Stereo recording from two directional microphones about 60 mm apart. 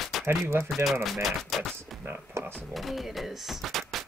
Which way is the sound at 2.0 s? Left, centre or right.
Right.